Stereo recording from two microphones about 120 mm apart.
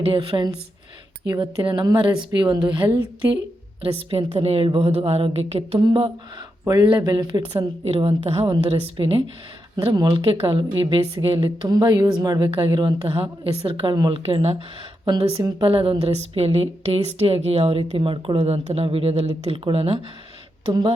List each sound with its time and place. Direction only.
0.0 s a woman's voice: 45° right (ahead or behind)
4.1 s speech: 55° right (ahead or behind)
5.8 s a woman's voice: 45° right (ahead or behind)
7.9 s speech: 55° right (ahead or behind)
8.4 s a woman's voice: 45° right (ahead or behind)
9.7 s a woman's voice: 35° right (ahead or behind)
12.5 s a woman's voice: 45° right (ahead or behind)
14.3 s speech: 55° right (ahead or behind)
15.0 s a woman's voice: 45° right (ahead or behind)